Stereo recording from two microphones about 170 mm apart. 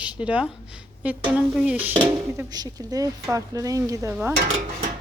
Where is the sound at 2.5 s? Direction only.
20° right (ahead or behind).